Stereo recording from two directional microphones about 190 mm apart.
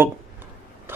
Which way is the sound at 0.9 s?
10° right (ahead or behind).